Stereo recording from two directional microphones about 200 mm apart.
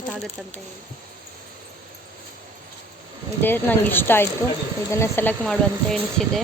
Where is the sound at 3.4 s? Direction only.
10° left (ahead or behind).